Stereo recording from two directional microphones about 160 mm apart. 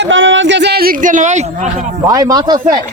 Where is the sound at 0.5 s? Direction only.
90° right; by 1.4 s 50° right (ahead or behind).